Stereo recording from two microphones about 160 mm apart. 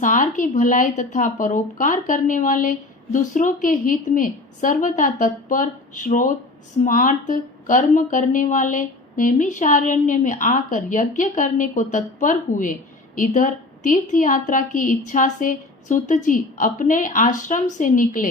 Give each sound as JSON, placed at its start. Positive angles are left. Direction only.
{"t": 0.0, "sound": "speech", "side_deg": 55}